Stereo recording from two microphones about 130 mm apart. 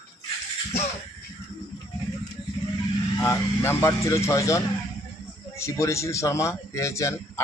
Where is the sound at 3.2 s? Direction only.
20° left (ahead or behind).